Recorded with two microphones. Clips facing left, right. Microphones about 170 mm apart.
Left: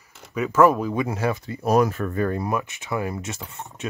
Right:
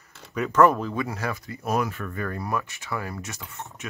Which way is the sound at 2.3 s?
20° left (ahead or behind).